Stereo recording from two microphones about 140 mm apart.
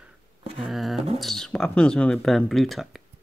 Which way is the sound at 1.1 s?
Centre (ahead or behind).